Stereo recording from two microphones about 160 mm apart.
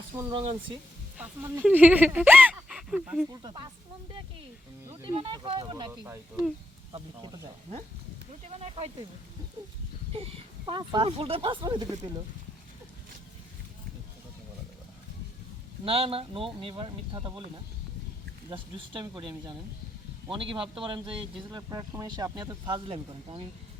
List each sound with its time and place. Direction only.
0.2 s speech: 30° right (ahead or behind)
1.2 s speech: 10° right (ahead or behind)
3.2 s speech: 25° right (ahead or behind)
4.9 s speech: 30° right (ahead or behind)
6.9 s speech: 30° right (ahead or behind)
8.4 s speech: 40° right (ahead or behind)
10.1 s speech: 35° right (ahead or behind)
15.8 s speech: 35° right (ahead or behind)
18.5 s speech: 30° right (ahead or behind)